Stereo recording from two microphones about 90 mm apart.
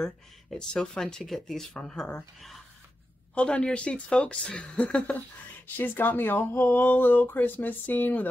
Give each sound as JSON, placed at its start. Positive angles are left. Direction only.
{"t": 0.0, "sound": "speech", "side_deg": 5}